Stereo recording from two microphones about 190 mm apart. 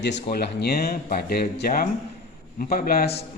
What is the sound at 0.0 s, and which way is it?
Speech, 60° left (ahead or behind).